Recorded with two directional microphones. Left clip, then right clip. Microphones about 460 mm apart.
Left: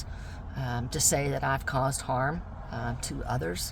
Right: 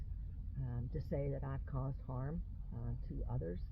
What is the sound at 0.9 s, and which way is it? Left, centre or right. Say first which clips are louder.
Speech: left 14 dB; centre.